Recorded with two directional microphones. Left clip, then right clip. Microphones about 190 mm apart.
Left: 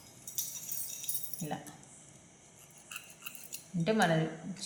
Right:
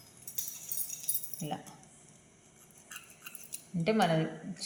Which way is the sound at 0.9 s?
20° right (ahead or behind).